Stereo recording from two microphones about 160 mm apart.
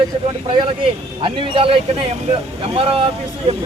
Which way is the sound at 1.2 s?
35° right (ahead or behind).